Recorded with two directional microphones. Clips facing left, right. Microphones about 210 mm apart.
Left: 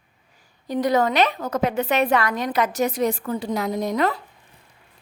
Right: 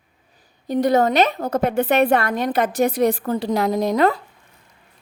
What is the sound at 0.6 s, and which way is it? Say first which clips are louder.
A woman's voice: right 3 dB; 50° right (ahead or behind).